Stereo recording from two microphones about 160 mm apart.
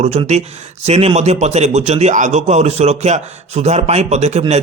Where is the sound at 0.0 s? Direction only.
45° right (ahead or behind).